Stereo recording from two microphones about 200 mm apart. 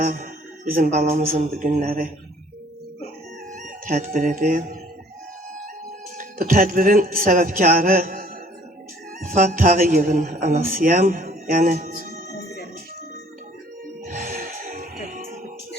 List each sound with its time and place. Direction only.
0.0 s a man's voice: 45° right (ahead or behind)
3.5 s speech: 45° right (ahead or behind)
6.1 s a man's voice: 45° right (ahead or behind)
9.4 s a man's voice: 45° right (ahead or behind)
14.0 s music: 45° right (ahead or behind)